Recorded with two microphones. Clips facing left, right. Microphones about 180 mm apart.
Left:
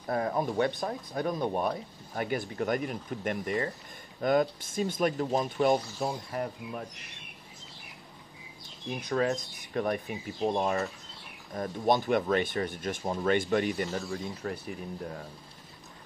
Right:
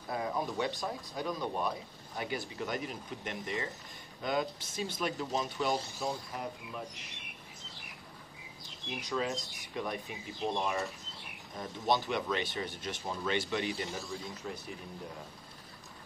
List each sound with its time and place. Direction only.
0.1 s speech: 50° left (ahead or behind)
9.0 s speech: 55° left (ahead or behind)